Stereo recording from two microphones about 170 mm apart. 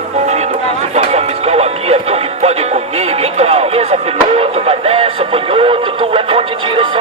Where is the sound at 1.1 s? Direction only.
40° right (ahead or behind).